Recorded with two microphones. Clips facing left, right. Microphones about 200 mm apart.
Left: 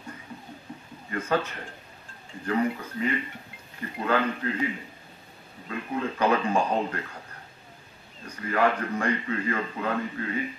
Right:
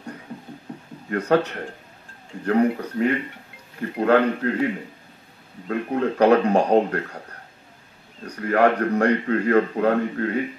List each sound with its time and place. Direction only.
1.1 s a man's voice: 65° right (ahead or behind)
8.3 s a man's voice: 65° right (ahead or behind)